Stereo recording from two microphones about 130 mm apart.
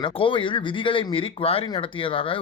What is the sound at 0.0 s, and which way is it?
Speech, 40° left (ahead or behind).